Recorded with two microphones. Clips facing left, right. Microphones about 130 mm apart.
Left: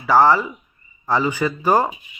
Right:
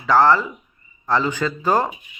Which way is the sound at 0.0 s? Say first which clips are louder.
Left 1 dB; 10° left (ahead or behind).